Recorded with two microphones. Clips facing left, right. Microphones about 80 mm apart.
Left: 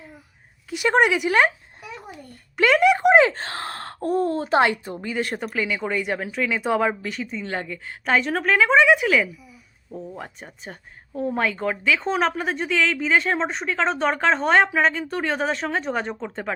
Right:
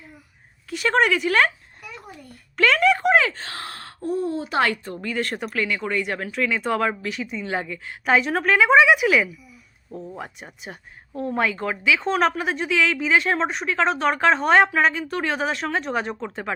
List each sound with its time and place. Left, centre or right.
0.7 s a woman's voice: centre
3.3 s speech: left
4.5 s speech: centre